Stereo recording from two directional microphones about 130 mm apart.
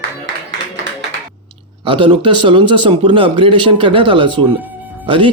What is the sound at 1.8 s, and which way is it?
Speech, 40° right (ahead or behind).